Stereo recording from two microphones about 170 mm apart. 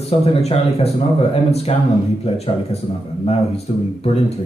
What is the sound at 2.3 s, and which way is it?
Speech, 35° left (ahead or behind).